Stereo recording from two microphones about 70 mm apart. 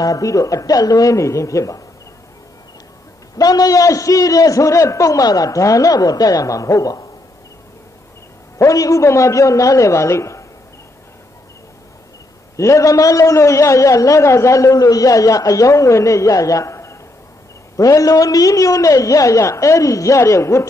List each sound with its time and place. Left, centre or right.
0.0 s a man's voice: left
3.3 s a man's voice: left
8.5 s a man's voice: left
12.5 s a man's voice: left